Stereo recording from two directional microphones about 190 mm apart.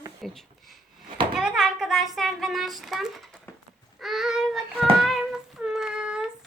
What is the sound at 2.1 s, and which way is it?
Speech, centre (ahead or behind).